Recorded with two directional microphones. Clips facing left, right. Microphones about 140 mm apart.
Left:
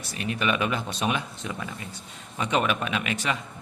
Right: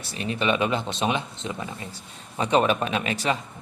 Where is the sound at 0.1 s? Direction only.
30° right (ahead or behind).